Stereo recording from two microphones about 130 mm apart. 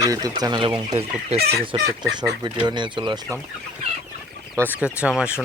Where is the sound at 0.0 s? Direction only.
25° right (ahead or behind).